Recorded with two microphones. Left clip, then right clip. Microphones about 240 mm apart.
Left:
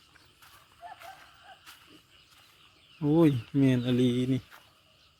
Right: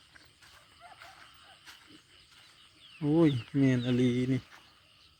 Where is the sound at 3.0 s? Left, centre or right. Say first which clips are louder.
Left 2 dB; centre.